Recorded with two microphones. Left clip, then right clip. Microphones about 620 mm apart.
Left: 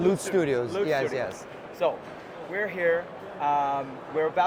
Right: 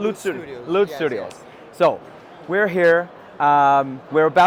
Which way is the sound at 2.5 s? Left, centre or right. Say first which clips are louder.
Right 10 dB; right.